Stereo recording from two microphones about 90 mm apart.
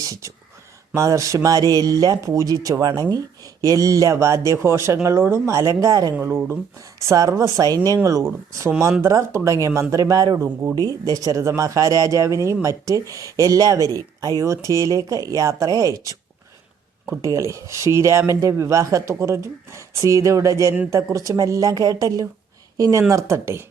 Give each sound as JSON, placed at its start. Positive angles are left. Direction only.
{"t": 0.0, "sound": "speech", "side_deg": -35}
{"t": 17.2, "sound": "speech", "side_deg": -35}